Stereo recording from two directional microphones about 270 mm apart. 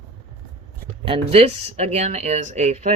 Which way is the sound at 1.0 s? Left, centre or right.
Right.